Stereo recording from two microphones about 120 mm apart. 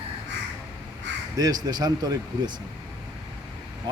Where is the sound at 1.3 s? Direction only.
35° right (ahead or behind).